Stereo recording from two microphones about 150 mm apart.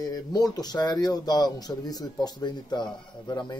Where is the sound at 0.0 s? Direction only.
25° left (ahead or behind).